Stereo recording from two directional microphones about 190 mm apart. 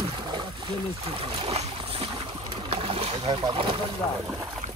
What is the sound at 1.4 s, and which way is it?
Boat, 30° right (ahead or behind).